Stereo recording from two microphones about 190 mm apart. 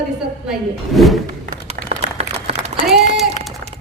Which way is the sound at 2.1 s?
35° right (ahead or behind).